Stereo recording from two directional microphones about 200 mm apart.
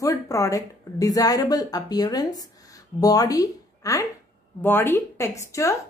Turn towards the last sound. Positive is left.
turn(degrees=15)  # may be behind; listen again after turning